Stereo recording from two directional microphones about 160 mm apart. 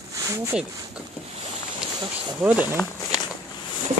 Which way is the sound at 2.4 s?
10° right (ahead or behind).